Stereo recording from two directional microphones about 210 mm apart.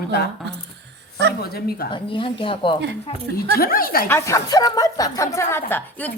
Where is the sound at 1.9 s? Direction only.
25° left (ahead or behind).